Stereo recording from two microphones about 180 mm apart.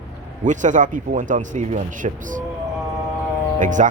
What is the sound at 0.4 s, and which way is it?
Speech, 45° right (ahead or behind).